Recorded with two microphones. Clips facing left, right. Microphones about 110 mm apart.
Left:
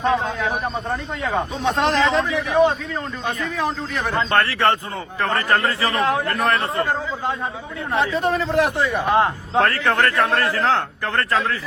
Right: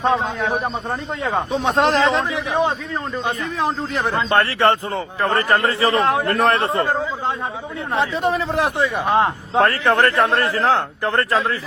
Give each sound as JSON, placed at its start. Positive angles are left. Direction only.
{"t": 0.0, "sound": "a man's voice", "side_deg": -30}
{"t": 7.9, "sound": "a man's voice", "side_deg": -25}